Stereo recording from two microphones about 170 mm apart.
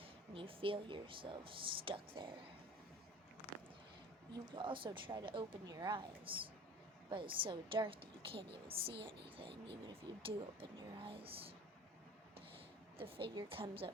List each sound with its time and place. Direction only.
0.3 s speech: 30° right (ahead or behind)
4.5 s a woman's voice: 30° right (ahead or behind)
10.2 s speech: 30° right (ahead or behind)
13.0 s speech: 35° right (ahead or behind)